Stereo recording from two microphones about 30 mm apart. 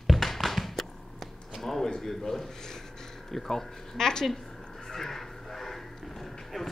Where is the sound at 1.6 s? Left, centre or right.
Centre.